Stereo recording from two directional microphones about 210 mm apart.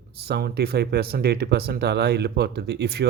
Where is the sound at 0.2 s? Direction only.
50° right (ahead or behind).